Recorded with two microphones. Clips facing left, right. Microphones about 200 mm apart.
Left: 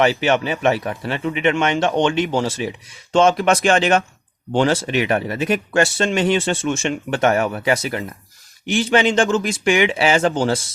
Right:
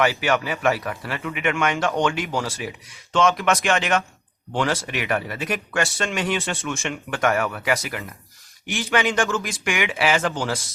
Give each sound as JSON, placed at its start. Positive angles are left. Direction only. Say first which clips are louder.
{"t": 0.0, "sound": "speech", "louder": "left 4 dB", "side_deg": 25}